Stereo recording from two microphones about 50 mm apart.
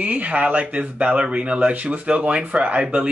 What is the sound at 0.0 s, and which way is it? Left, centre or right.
Speech, right.